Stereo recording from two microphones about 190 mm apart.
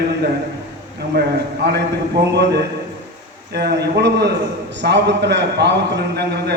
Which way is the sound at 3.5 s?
60° right (ahead or behind).